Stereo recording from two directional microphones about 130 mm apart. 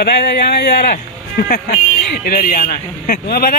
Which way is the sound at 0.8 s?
90° left.